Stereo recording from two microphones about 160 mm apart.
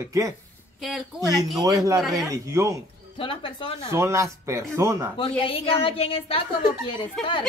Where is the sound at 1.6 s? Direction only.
25° right (ahead or behind).